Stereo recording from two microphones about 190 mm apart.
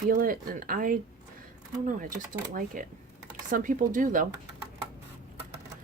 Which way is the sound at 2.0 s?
45° right (ahead or behind).